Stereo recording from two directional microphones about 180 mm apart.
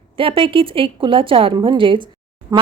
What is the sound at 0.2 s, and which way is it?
A woman's voice, 30° right (ahead or behind).